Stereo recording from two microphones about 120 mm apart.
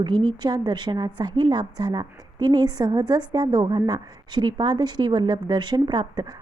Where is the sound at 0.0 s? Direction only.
40° right (ahead or behind).